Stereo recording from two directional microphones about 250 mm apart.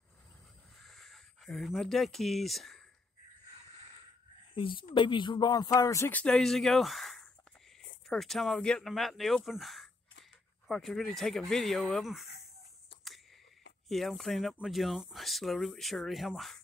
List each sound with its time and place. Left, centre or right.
0.8 s speech: centre
4.6 s speech: centre
13.8 s speech: centre